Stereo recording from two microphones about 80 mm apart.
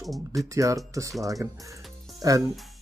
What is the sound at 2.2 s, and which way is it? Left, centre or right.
Speech, right.